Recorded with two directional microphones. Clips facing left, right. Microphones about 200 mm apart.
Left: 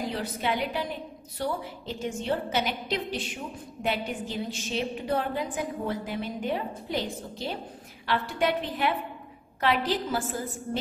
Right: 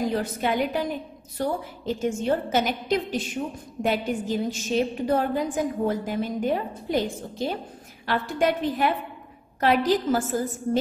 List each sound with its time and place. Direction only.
0.1 s a woman's voice: 45° right (ahead or behind)